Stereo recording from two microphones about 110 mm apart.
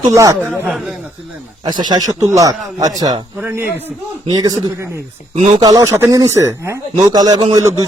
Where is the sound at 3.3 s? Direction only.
20° right (ahead or behind).